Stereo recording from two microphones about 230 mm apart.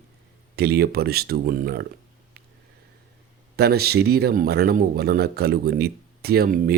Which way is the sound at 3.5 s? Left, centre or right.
Right.